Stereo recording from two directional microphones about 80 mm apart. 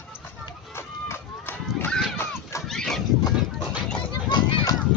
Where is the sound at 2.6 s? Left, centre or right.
Centre.